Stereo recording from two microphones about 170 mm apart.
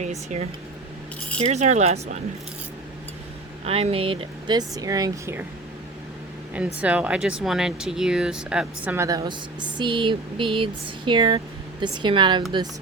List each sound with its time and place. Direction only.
0.0 s speech: 40° right (ahead or behind)
3.7 s speech: 35° right (ahead or behind); by 5.5 s 15° right (ahead or behind)
6.7 s speech: 10° right (ahead or behind)
9.0 s speech: 20° right (ahead or behind)